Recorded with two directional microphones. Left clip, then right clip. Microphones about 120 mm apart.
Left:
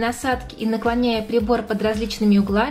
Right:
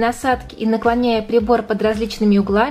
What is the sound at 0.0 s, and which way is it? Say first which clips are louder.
A woman's voice: right 5 dB; 20° right (ahead or behind).